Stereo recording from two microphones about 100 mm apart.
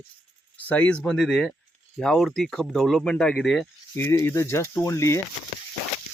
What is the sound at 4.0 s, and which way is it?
Speech, 25° left (ahead or behind).